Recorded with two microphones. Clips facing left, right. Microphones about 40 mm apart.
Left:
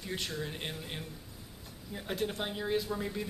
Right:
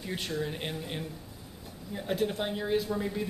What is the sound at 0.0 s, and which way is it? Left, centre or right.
Speech, centre.